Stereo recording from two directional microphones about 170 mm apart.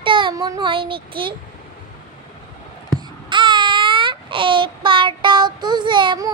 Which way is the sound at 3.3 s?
30° right (ahead or behind).